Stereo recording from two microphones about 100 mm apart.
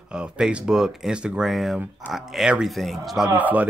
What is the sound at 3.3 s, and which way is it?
Speech, 15° right (ahead or behind).